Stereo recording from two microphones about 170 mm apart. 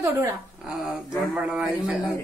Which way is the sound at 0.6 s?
5° right (ahead or behind).